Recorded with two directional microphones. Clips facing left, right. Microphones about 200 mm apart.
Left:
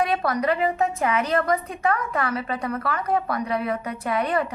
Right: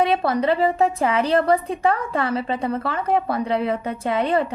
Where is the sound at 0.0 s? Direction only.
25° right (ahead or behind).